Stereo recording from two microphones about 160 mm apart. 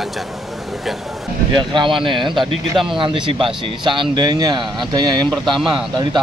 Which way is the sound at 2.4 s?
Centre (ahead or behind).